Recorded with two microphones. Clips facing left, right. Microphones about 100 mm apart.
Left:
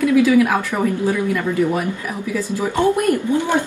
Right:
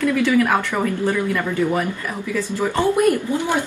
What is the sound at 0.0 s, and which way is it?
Speech, 10° left (ahead or behind).